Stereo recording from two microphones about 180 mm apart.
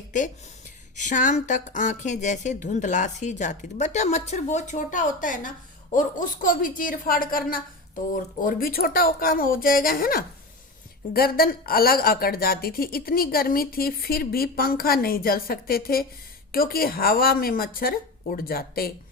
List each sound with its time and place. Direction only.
0.9 s a woman's voice: 45° left (ahead or behind)